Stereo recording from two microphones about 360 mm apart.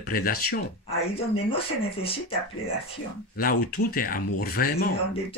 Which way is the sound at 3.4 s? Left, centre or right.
Left.